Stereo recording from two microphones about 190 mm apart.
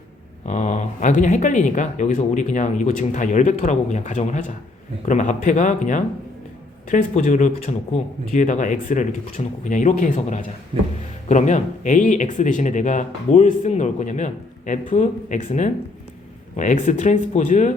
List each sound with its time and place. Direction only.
0.4 s speech: 40° left (ahead or behind)
16.6 s speech: 40° left (ahead or behind)